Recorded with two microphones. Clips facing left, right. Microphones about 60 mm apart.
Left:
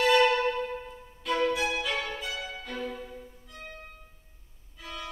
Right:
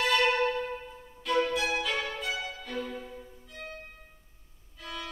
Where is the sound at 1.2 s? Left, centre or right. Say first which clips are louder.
Left 1 dB; centre.